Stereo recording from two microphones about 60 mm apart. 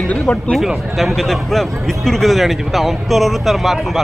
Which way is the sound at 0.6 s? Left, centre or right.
Centre.